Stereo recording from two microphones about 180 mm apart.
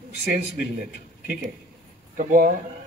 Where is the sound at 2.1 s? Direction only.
45° right (ahead or behind).